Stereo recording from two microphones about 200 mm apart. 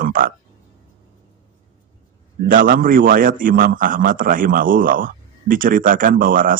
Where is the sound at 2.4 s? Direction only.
45° right (ahead or behind).